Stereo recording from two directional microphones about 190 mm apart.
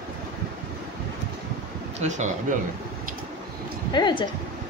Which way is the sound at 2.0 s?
40° right (ahead or behind).